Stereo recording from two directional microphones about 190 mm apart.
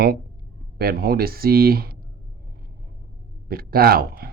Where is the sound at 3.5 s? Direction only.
50° right (ahead or behind).